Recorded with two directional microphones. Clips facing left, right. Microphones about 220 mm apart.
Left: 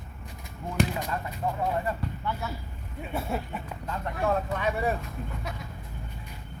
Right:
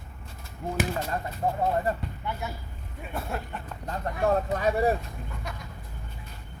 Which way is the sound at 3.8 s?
40° right (ahead or behind).